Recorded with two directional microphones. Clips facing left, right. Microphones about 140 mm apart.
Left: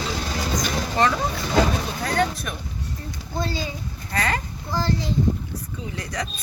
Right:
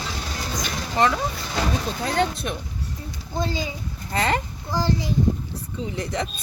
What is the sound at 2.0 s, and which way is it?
A child's voice, 25° right (ahead or behind).